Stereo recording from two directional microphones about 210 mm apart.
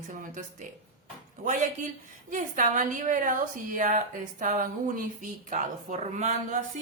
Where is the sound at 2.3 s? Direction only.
40° right (ahead or behind).